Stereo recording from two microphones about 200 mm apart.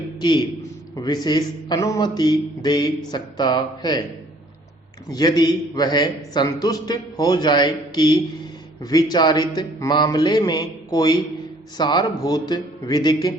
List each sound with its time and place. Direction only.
0.2 s a man's voice: 20° left (ahead or behind)
5.0 s a man's voice: 20° left (ahead or behind)